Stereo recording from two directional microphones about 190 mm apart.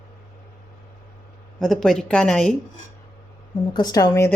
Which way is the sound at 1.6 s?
Centre (ahead or behind).